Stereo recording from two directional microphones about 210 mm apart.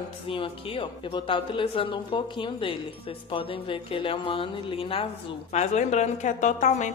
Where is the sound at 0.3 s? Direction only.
25° left (ahead or behind).